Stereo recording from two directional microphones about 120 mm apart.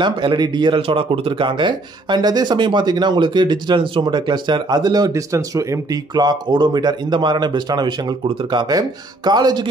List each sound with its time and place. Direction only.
0.0 s speech: 40° right (ahead or behind)
6.1 s speech: 35° right (ahead or behind)